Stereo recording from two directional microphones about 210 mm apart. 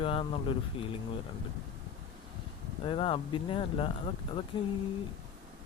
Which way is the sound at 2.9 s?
25° left (ahead or behind).